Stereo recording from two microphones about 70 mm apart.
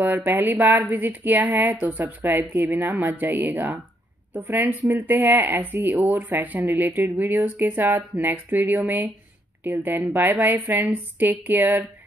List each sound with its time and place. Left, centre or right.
0.0 s speech: right